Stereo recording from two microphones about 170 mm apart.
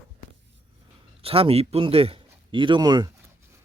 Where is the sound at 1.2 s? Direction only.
35° right (ahead or behind).